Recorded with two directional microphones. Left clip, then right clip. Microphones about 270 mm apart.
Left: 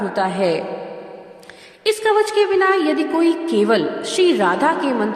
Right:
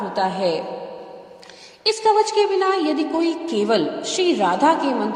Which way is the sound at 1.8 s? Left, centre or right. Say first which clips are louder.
Left 1 dB; left.